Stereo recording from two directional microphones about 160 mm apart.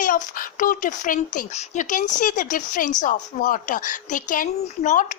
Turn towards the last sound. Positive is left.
turn(degrees=55)  # may be behind; listen again after turning